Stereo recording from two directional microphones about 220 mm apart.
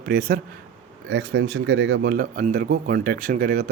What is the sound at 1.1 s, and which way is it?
Speech, 55° right (ahead or behind).